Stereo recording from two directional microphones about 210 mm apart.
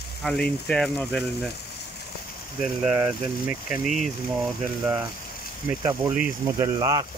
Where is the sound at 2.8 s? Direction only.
10° right (ahead or behind).